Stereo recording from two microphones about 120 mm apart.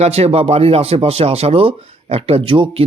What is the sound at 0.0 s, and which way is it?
Speech, 60° right (ahead or behind).